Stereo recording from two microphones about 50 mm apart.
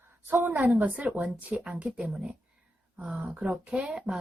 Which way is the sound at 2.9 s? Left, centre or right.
Right.